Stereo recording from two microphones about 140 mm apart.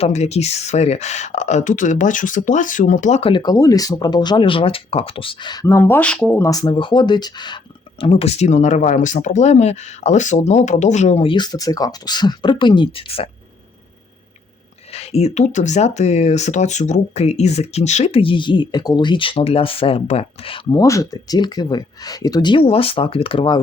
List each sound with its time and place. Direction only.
0.0 s speech: 50° left (ahead or behind)
3.2 s speech: 40° left (ahead or behind)
3.4 s speech: 25° left (ahead or behind)
6.5 s speech: 30° left (ahead or behind)
8.0 s speech: 45° left (ahead or behind)
14.9 s speech: 45° left (ahead or behind)
20.7 s speech: 25° left (ahead or behind); by 23.6 s 40° left (ahead or behind)